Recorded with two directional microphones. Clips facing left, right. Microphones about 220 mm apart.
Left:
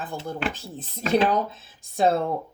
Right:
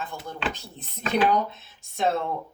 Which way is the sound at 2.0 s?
35° left (ahead or behind).